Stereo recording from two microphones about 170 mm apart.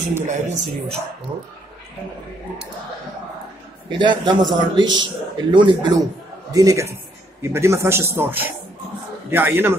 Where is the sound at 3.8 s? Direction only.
25° right (ahead or behind).